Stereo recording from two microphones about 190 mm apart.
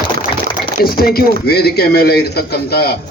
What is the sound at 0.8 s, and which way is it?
A man's voice, 50° left (ahead or behind).